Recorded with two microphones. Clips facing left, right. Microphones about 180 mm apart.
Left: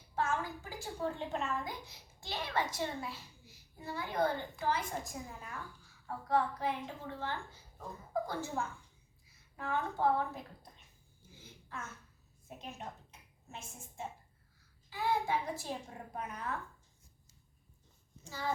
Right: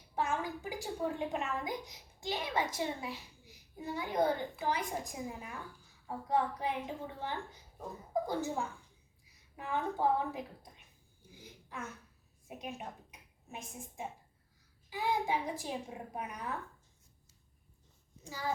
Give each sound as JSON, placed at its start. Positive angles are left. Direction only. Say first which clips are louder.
{"t": 0.2, "sound": "a woman's voice", "louder": "right 1 dB", "side_deg": -15}
{"t": 11.3, "sound": "a sound", "louder": "even", "side_deg": -15}
{"t": 12.5, "sound": "a woman's voice", "louder": "right 3 dB", "side_deg": -15}
{"t": 18.2, "sound": "a child's voice", "louder": "even", "side_deg": -10}